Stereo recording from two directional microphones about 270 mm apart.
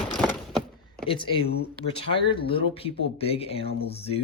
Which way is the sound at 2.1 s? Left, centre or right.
Centre.